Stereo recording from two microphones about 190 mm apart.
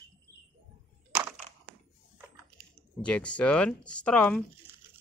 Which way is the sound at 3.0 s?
5° left (ahead or behind).